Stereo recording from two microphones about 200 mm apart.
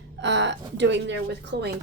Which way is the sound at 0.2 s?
60° right (ahead or behind).